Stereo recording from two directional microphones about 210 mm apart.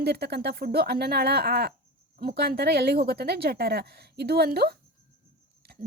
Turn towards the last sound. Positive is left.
turn(degrees=-50)  # may be behind; listen again after turning